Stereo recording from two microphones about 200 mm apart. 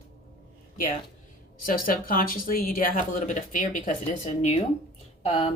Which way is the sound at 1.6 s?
45° left (ahead or behind).